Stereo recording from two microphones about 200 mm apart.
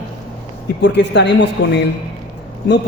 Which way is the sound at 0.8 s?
60° left (ahead or behind).